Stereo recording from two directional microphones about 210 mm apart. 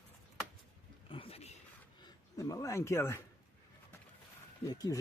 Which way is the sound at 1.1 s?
25° left (ahead or behind).